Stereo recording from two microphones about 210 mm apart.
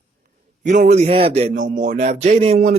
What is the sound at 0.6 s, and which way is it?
Speech, 35° right (ahead or behind).